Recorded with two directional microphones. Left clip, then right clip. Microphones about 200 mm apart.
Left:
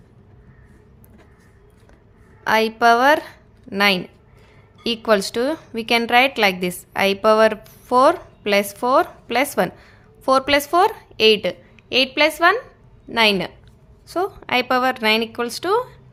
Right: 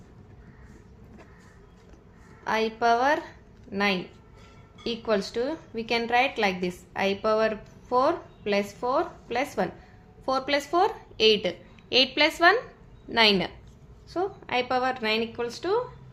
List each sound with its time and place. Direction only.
2.4 s a woman's voice: 40° left (ahead or behind); by 13.5 s 25° left (ahead or behind)
14.1 s a woman's voice: 40° left (ahead or behind)